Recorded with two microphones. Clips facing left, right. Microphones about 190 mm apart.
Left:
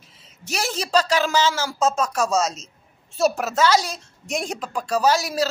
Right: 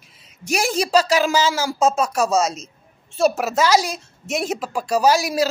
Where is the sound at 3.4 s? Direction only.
10° right (ahead or behind).